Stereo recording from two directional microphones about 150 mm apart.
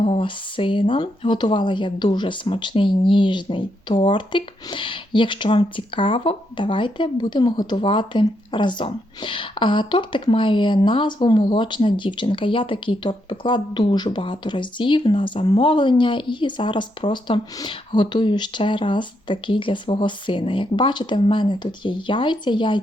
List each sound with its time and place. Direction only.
0.0 s speech: 35° left (ahead or behind)